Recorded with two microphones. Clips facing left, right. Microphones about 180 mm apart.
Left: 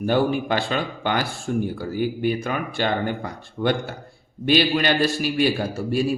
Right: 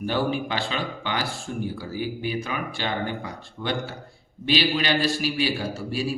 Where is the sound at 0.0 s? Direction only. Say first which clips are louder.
Left 5 dB; 50° left (ahead or behind).